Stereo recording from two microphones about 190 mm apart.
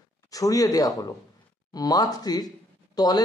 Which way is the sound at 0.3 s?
20° left (ahead or behind).